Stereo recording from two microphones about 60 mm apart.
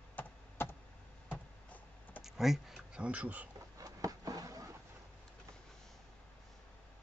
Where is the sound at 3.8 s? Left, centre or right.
Right.